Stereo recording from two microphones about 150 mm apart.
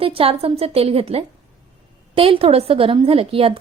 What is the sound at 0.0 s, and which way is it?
A woman's voice, 40° right (ahead or behind).